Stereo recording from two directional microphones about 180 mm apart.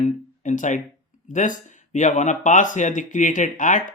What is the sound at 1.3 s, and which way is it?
Speech, 45° left (ahead or behind).